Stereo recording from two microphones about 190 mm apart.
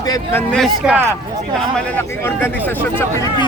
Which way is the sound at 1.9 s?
10° left (ahead or behind).